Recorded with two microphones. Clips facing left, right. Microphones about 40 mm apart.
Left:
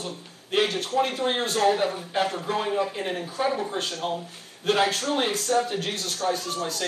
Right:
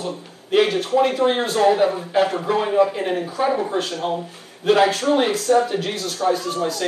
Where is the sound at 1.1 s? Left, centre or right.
Centre.